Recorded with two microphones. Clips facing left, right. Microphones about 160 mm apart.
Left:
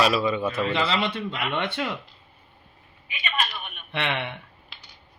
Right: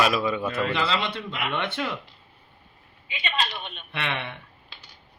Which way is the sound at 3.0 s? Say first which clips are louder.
Even; 20° right (ahead or behind).